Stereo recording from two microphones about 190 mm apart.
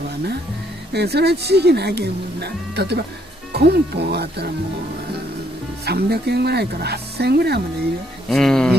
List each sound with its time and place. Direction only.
0.9 s speech: 60° right (ahead or behind)
5.9 s speech: 60° right (ahead or behind)
8.3 s speech: 5° left (ahead or behind)